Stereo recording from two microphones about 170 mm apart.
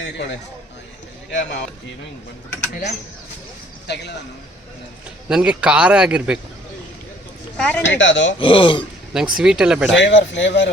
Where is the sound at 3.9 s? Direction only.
80° left.